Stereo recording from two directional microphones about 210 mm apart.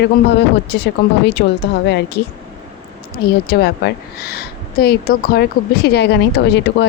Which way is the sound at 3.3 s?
50° left (ahead or behind).